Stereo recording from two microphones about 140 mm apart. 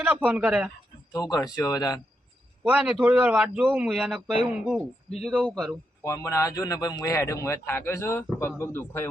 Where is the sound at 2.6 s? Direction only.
10° right (ahead or behind).